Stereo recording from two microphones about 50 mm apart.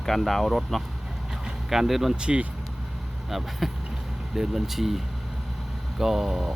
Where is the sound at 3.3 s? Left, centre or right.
Centre.